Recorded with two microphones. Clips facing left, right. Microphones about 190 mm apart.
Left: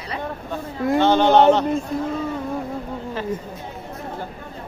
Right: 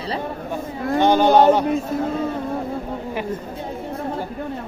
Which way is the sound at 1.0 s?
10° right (ahead or behind).